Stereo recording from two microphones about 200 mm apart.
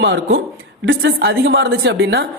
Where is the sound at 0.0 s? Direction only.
60° right (ahead or behind).